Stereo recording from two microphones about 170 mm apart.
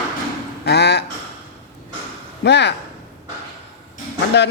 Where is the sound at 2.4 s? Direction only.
90° left.